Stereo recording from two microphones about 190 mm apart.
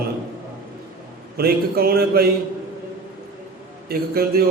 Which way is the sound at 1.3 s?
55° right (ahead or behind).